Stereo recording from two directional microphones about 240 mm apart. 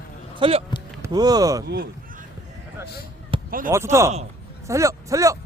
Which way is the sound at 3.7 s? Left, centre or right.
Centre.